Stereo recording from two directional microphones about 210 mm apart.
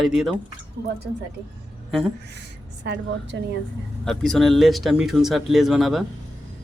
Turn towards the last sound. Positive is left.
turn(degrees=0)  # may be behind; listen again after turning